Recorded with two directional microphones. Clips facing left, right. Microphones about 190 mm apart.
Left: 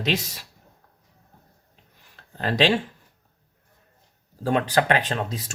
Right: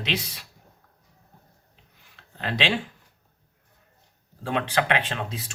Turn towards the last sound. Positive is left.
turn(degrees=40)  # may be behind; listen again after turning